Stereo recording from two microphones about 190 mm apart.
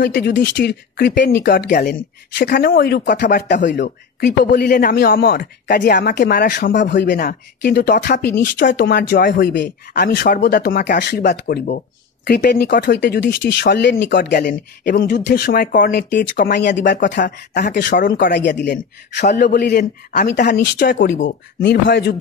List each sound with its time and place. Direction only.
0.0 s speech: 65° left (ahead or behind)
4.5 s a man's voice: 50° left (ahead or behind); by 9.7 s 65° left (ahead or behind)
9.9 s a man's voice: 50° left (ahead or behind)
12.3 s speech: 60° left (ahead or behind)
12.8 s speech: 65° left (ahead or behind)
15.0 s speech: 65° left (ahead or behind)
17.0 s a man's voice: 45° left (ahead or behind)
18.1 s speech: 60° left (ahead or behind)
19.2 s speech: 45° left (ahead or behind)